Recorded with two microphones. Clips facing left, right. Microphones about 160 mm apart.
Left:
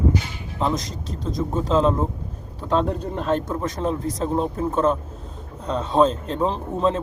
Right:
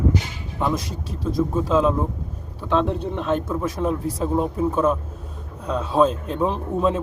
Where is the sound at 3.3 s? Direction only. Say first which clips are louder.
Even; 5° right (ahead or behind).